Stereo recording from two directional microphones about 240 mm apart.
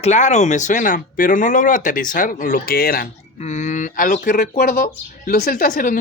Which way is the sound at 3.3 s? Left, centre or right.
Left.